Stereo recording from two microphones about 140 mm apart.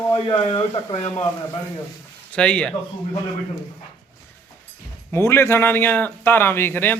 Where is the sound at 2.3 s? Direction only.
5° left (ahead or behind).